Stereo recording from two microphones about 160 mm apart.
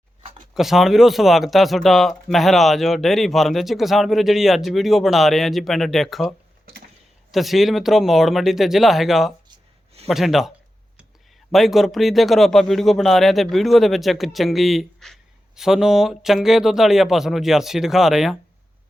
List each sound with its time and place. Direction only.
0.5 s speech: centre (ahead or behind)
9.5 s a sound: 40° right (ahead or behind)
10.1 s speech: centre (ahead or behind)
11.5 s speech: centre (ahead or behind)